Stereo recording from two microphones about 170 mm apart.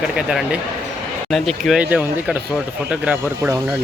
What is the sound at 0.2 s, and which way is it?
Speech, 5° right (ahead or behind).